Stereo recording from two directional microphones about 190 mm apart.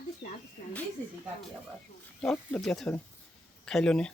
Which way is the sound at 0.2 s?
60° left (ahead or behind).